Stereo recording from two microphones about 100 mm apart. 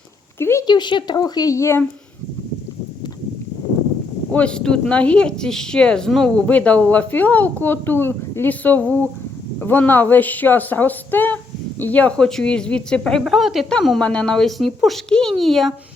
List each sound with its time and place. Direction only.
0.3 s a sound: 25° left (ahead or behind)
0.7 s a woman's voice: 50° left (ahead or behind); by 1.8 s 30° left (ahead or behind)
4.3 s a woman's voice: 10° left (ahead or behind)